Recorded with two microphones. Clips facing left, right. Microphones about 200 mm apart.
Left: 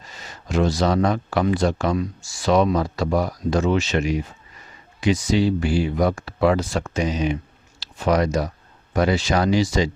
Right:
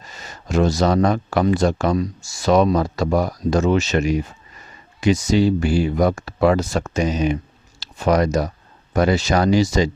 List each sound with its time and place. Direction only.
0.2 s speech: 45° right (ahead or behind)